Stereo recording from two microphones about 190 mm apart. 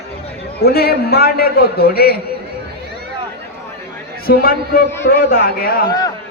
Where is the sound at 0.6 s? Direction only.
55° left (ahead or behind).